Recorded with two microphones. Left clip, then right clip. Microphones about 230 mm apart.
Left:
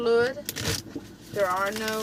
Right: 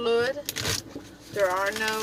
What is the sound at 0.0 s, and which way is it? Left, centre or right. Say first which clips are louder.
Vehicle: left 2 dB; right.